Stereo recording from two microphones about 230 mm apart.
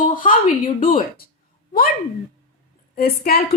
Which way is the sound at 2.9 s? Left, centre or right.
Left.